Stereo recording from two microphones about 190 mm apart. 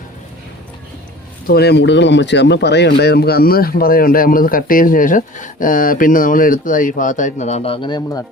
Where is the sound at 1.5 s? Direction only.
60° left (ahead or behind).